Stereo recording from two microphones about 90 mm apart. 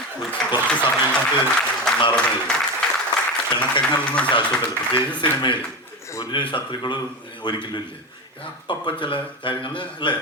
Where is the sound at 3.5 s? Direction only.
65° left (ahead or behind).